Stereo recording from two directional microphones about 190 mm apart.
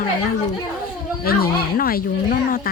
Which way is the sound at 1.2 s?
50° left (ahead or behind).